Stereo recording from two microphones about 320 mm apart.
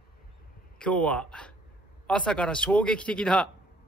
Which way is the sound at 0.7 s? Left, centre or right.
Centre.